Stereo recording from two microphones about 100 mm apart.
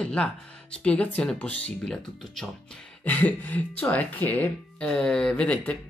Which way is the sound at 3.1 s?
15° left (ahead or behind).